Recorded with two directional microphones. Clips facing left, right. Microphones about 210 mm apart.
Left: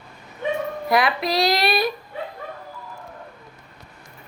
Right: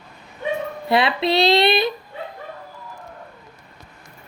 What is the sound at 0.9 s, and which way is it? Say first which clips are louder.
Speech: right 3 dB; 25° right (ahead or behind).